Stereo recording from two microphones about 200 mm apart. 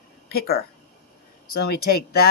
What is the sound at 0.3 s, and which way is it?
Speech, 50° left (ahead or behind).